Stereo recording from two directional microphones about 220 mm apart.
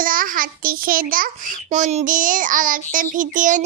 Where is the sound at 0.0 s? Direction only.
40° right (ahead or behind).